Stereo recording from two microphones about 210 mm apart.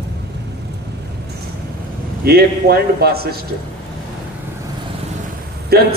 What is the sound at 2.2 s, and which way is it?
A man's voice, 50° right (ahead or behind).